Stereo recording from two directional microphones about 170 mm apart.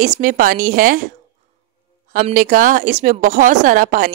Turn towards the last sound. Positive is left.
turn(degrees=-55)  # may be behind; listen again after turning